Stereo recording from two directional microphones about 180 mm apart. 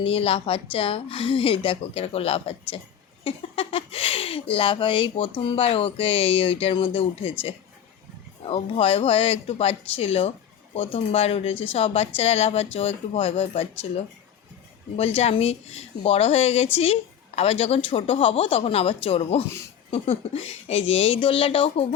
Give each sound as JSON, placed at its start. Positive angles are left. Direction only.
{"t": 0.0, "sound": "a woman's voice", "side_deg": 30}
{"t": 8.4, "sound": "a woman's voice", "side_deg": 30}